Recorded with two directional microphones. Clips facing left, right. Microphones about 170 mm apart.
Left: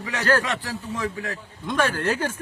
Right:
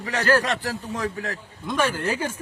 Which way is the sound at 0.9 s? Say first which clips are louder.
Left 2 dB; 40° right (ahead or behind).